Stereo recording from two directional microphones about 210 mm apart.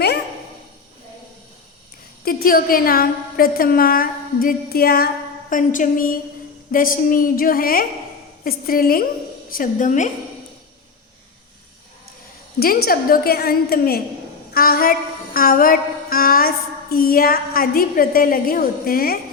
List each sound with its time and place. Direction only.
2.2 s a woman's voice: 45° left (ahead or behind)
12.5 s a woman's voice: 45° left (ahead or behind)
14.5 s a sound: 45° left (ahead or behind)
16.9 s a woman's voice: 45° left (ahead or behind)